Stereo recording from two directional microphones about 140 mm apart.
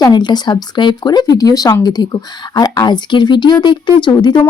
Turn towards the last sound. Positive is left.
turn(degrees=30)  # may be behind; listen again after turning